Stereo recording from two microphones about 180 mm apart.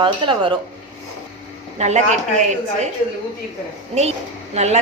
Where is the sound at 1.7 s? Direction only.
40° right (ahead or behind).